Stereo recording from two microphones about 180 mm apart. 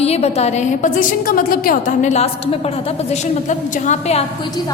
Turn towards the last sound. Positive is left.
turn(degrees=40)  # may be behind; listen again after turning